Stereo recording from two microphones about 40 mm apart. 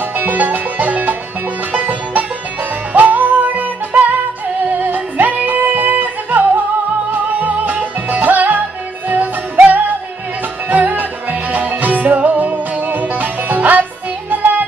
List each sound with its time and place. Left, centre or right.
0.2 s music: right